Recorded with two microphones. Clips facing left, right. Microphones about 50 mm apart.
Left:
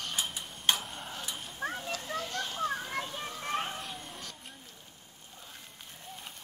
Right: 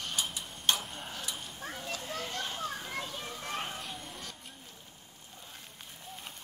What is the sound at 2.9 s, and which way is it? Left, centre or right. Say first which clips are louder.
Children playing: left 2 dB; left.